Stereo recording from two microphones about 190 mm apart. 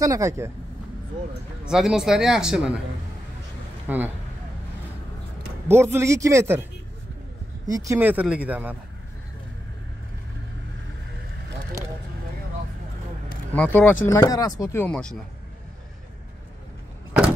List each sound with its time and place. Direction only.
0.0 s speech: 15° right (ahead or behind)
1.7 s speech: centre (ahead or behind)
3.8 s speech: 10° right (ahead or behind)
5.7 s speech: 10° right (ahead or behind)
13.6 s speech: 10° left (ahead or behind)